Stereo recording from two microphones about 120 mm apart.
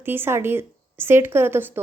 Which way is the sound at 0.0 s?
20° right (ahead or behind).